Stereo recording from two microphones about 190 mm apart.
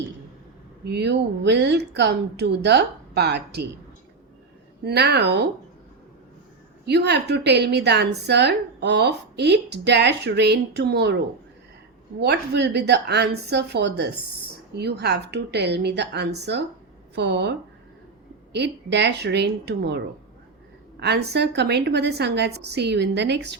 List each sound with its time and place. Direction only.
0.9 s a woman's voice: 65° right (ahead or behind)
4.8 s a woman's voice: 60° right (ahead or behind)
6.8 s a woman's voice: 60° right (ahead or behind)
12.2 s a woman's voice: 65° right (ahead or behind)
18.5 s a woman's voice: 65° right (ahead or behind)
21.0 s a woman's voice: 60° right (ahead or behind)